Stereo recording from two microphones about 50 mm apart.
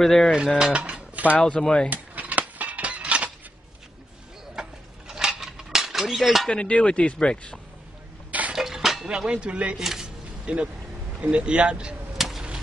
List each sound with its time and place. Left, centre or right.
0.0 s mechanisms: centre
0.6 s speech: centre
1.1 s a sound: right
1.6 s speech: centre
1.9 s cutlery: right
4.6 s cutlery: centre
6.5 s speech: left
8.3 s a sound: right
8.5 s a sound: centre; by 9.8 s right
9.8 s speech: centre
10.4 s speech: right
12.2 s a sound: centre